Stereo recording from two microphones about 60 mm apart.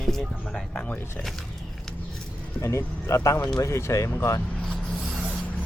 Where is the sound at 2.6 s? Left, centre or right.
Left.